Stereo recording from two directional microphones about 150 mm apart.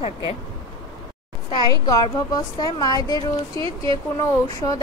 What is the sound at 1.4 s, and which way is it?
A woman's voice, 25° left (ahead or behind).